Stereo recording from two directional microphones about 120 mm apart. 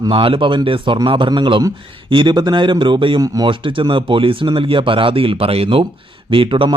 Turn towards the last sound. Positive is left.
turn(degrees=-45)  # may be behind; listen again after turning